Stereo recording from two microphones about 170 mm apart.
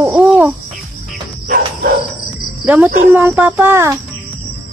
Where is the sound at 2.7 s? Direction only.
10° right (ahead or behind).